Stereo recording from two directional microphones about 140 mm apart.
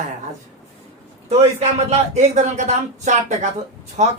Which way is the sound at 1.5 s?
55° right (ahead or behind).